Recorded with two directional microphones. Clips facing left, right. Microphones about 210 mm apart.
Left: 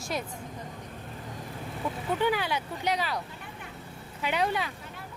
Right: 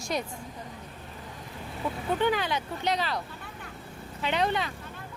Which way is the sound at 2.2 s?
10° left (ahead or behind).